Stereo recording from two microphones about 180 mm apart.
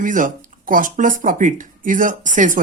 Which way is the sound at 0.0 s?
45° right (ahead or behind).